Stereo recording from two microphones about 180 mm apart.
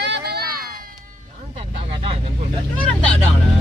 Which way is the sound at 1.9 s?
35° right (ahead or behind).